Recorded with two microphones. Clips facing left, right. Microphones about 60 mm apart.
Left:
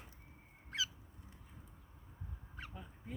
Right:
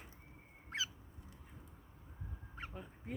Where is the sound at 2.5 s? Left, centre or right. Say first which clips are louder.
Right 3 dB; right.